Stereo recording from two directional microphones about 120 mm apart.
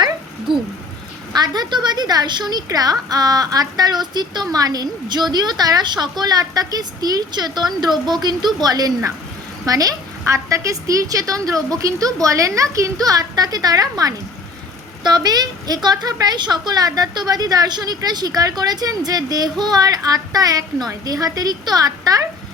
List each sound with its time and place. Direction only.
1.3 s a woman's voice: 35° right (ahead or behind)